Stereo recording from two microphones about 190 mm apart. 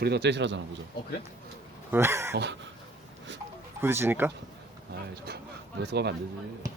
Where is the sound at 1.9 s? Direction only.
15° right (ahead or behind).